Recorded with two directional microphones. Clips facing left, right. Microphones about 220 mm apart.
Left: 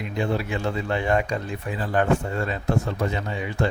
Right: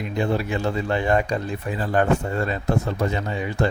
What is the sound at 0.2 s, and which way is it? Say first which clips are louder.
Speech: right 2 dB; 40° right (ahead or behind).